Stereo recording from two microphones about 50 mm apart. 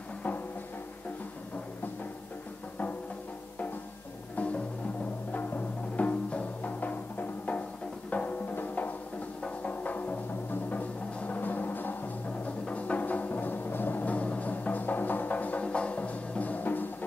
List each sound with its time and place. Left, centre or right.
4.4 s music: left